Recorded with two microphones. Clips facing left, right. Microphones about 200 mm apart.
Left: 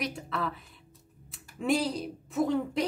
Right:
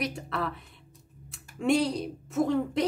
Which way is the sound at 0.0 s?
Centre (ahead or behind).